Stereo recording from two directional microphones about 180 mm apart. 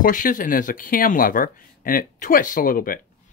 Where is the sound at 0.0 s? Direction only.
50° left (ahead or behind).